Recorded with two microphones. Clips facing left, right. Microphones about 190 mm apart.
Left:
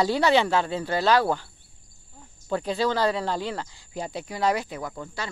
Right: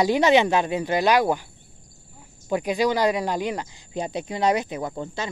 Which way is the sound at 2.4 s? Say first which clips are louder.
Right 3 dB; 15° right (ahead or behind).